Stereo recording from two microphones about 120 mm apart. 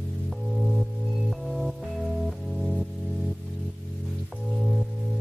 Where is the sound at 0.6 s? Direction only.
Centre (ahead or behind).